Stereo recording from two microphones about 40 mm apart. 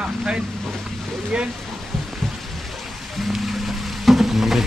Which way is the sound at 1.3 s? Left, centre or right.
Right.